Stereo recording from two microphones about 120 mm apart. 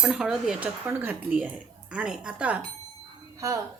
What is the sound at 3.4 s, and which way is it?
Speech, 25° right (ahead or behind).